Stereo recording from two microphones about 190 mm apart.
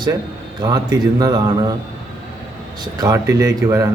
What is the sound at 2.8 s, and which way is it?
Speech, 20° right (ahead or behind).